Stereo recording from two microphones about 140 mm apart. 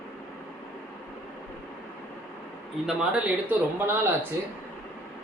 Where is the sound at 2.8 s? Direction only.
5° right (ahead or behind).